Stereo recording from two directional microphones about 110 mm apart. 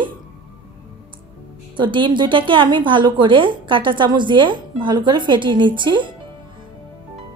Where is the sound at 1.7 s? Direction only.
45° right (ahead or behind).